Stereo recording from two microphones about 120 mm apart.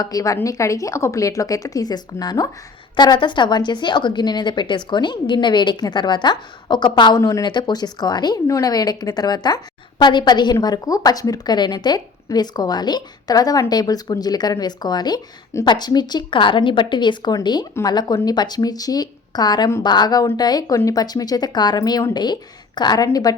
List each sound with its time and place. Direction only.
0.0 s speech: 30° left (ahead or behind)